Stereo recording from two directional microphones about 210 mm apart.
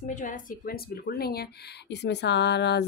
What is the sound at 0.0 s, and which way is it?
Speech, 35° left (ahead or behind).